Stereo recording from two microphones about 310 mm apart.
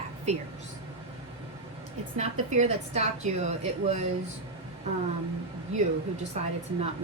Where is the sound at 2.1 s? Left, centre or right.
Right.